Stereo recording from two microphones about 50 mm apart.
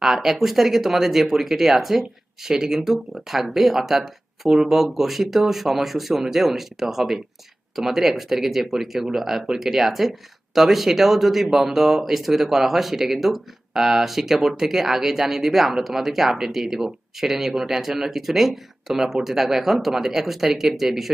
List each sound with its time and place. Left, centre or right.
0.0 s speech: centre